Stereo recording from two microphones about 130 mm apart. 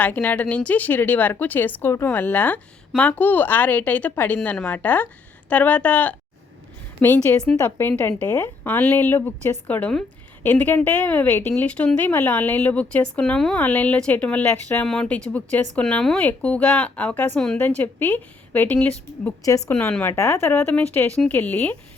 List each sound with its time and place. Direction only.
0.0 s a woman's voice: 15° left (ahead or behind)
19.5 s a woman's voice: 25° left (ahead or behind)